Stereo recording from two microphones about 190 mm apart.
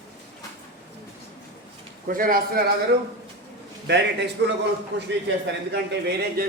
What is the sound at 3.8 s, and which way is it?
Speech, 65° right (ahead or behind).